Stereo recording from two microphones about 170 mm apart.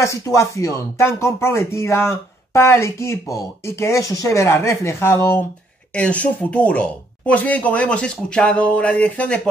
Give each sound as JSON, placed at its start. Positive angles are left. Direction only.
{"t": 0.0, "sound": "speech", "side_deg": 15}